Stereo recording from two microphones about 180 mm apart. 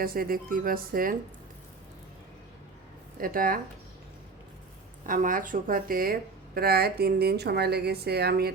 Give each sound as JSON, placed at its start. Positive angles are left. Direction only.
{"t": 0.0, "sound": "speech", "side_deg": -55}
{"t": 3.2, "sound": "speech", "side_deg": -50}
{"t": 5.0, "sound": "speech", "side_deg": -50}